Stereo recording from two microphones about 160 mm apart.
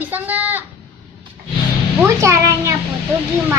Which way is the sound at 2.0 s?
15° right (ahead or behind).